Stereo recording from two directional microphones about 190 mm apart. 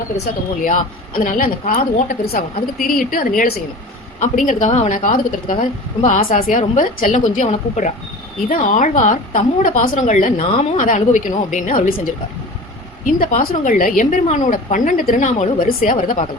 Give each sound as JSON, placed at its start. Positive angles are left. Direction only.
{"t": 0.6, "sound": "a woman's voice", "side_deg": 45}
{"t": 13.1, "sound": "a woman's voice", "side_deg": 45}